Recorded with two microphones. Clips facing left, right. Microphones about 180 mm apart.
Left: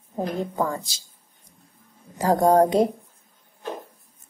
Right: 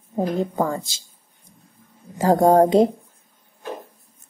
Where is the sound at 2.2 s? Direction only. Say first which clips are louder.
Right 3 dB; 25° right (ahead or behind).